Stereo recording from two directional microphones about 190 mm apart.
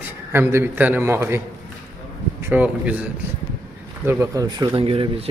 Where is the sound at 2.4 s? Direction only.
10° right (ahead or behind).